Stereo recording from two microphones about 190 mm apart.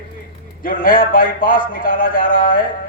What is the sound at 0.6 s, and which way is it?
A man's voice, 45° left (ahead or behind).